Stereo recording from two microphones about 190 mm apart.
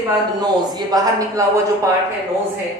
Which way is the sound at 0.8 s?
20° right (ahead or behind).